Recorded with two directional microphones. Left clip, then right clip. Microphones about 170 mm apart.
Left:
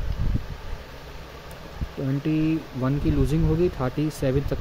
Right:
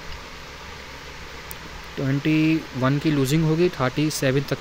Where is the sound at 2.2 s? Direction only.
Centre (ahead or behind).